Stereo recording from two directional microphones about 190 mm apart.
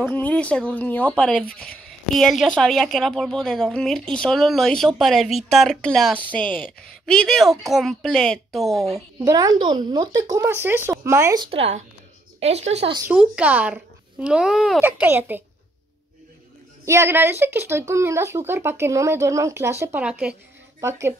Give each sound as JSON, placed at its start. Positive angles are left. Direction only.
{"t": 0.0, "sound": "a woman's voice", "side_deg": 10}
{"t": 9.2, "sound": "speech", "side_deg": -20}
{"t": 13.1, "sound": "speech", "side_deg": -5}
{"t": 16.8, "sound": "speech", "side_deg": -15}